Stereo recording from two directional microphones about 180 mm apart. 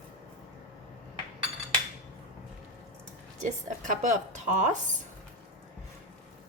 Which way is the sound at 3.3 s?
40° right (ahead or behind).